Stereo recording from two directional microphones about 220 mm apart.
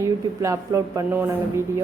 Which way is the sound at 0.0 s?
15° right (ahead or behind).